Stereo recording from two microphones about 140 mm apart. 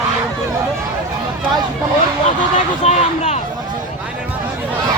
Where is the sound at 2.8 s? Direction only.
50° left (ahead or behind).